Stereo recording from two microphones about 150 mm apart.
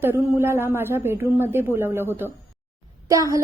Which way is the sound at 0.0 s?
15° right (ahead or behind).